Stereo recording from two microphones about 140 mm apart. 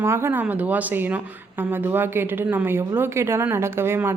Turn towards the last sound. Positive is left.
turn(degrees=-15)  # may be behind; listen again after turning